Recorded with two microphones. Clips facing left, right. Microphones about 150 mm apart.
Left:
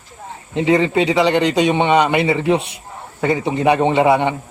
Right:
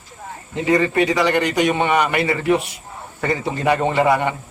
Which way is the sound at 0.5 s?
20° left (ahead or behind).